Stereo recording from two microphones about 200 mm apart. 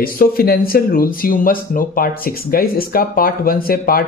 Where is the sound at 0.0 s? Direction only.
50° left (ahead or behind).